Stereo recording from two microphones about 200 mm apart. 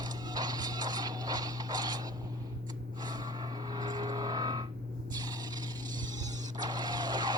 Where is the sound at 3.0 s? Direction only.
20° right (ahead or behind).